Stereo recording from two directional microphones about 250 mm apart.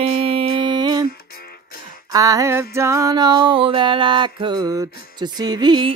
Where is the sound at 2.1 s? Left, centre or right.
Centre.